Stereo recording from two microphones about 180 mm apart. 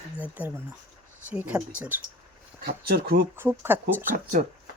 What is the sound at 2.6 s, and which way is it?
Speech, 60° right (ahead or behind).